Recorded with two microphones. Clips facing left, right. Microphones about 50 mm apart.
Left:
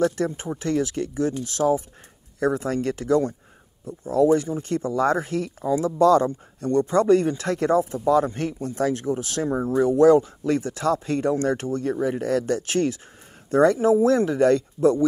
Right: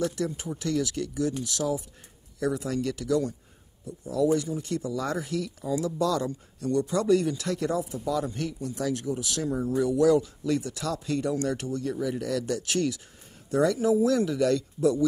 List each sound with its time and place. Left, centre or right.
0.0 s speech: left